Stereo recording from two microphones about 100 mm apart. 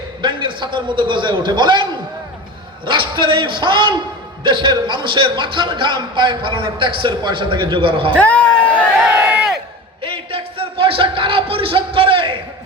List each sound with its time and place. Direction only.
0.2 s a man's voice: 55° right (ahead or behind)
8.2 s a sound: 15° left (ahead or behind)
9.0 s crowd: 10° right (ahead or behind)
10.0 s music: 60° right (ahead or behind)